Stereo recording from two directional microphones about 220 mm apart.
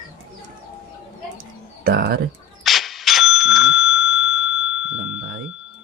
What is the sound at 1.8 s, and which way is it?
Speech, 45° right (ahead or behind).